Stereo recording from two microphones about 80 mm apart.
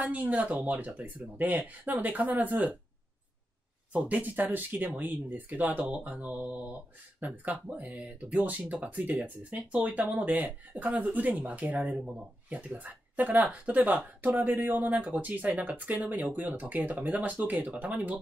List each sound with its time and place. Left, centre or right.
0.0 s speech: centre
3.9 s speech: right